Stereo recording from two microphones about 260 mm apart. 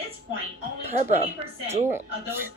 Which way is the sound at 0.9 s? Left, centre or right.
Right.